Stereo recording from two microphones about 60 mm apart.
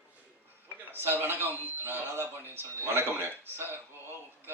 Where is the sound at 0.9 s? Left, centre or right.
Right.